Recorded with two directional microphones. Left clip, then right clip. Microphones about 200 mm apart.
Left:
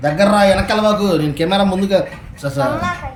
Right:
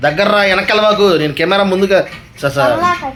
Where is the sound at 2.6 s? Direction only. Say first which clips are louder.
Right 6 dB; 25° right (ahead or behind).